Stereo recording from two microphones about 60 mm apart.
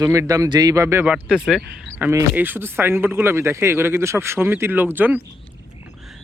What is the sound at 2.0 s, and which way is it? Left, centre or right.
Speech, right.